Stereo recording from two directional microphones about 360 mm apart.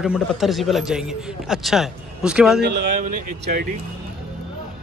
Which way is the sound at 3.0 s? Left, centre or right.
Right.